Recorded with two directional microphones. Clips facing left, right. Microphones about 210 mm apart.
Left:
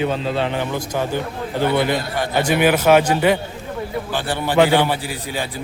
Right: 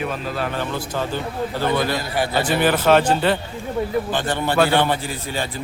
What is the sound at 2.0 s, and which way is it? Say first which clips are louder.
Speech: even; 5° right (ahead or behind).